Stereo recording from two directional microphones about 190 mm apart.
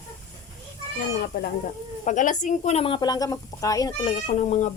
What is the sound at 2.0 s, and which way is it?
A woman's voice, 40° left (ahead or behind).